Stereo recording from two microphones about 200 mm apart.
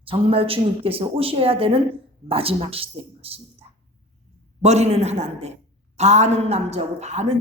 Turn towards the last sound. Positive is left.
turn(degrees=-35)  # may be behind; listen again after turning